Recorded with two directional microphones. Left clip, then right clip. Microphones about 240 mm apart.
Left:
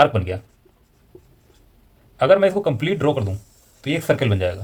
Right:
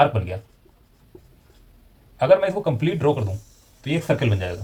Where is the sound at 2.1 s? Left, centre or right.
Left.